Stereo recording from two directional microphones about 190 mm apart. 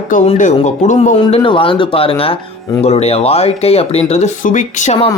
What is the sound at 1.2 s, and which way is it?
A man's voice, 25° left (ahead or behind).